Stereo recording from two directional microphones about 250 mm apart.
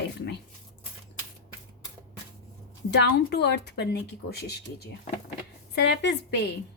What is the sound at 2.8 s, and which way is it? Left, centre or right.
A woman's voice, left.